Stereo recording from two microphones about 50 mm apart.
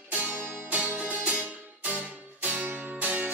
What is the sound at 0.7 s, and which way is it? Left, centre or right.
Music, right.